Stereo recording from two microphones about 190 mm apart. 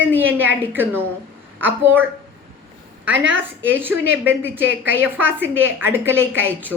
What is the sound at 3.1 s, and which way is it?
Speech, 75° right (ahead or behind).